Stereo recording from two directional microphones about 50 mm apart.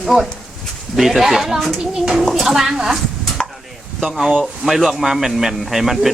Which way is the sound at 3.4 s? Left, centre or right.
Centre.